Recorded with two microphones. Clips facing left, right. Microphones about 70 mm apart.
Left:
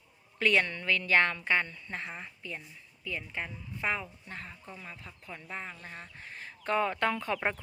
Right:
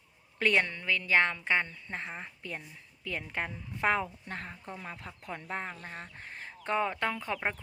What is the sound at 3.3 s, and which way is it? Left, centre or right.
Speech, right.